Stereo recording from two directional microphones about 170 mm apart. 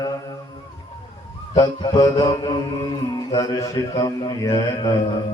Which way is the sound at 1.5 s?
25° left (ahead or behind).